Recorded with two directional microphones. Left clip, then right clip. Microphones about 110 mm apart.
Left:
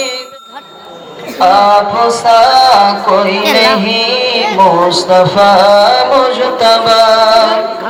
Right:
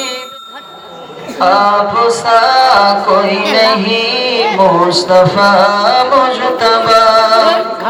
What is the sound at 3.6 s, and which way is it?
Carnatic music, 35° left (ahead or behind).